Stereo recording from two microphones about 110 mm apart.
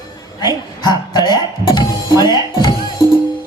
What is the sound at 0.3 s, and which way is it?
Music, 40° left (ahead or behind).